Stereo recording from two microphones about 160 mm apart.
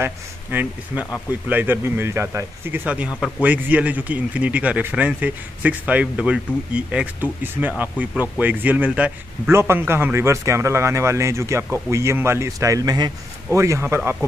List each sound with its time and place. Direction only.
0.0 s a man's voice: 10° right (ahead or behind)